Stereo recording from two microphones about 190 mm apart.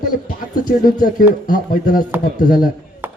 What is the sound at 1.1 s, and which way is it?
Speech, 45° left (ahead or behind).